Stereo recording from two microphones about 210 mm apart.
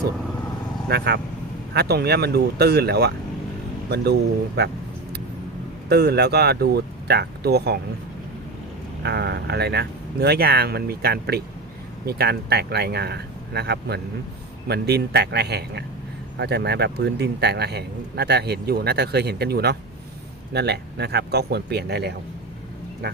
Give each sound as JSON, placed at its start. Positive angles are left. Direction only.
{"t": 0.9, "sound": "a man's voice", "side_deg": -50}
{"t": 5.9, "sound": "a man's voice", "side_deg": -50}
{"t": 9.0, "sound": "a man's voice", "side_deg": -50}